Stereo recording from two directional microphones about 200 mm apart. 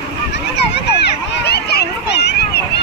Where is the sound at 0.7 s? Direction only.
55° left (ahead or behind).